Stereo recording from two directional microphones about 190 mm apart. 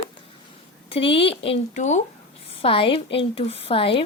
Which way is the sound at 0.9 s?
30° left (ahead or behind).